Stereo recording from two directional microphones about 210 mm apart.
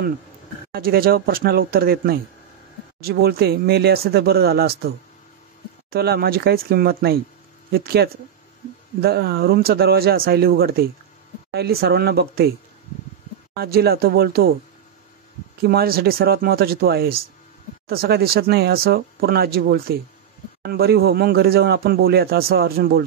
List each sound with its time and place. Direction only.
0.7 s speech: 45° right (ahead or behind)
13.6 s speech: 45° right (ahead or behind)
15.6 s speech: 45° right (ahead or behind)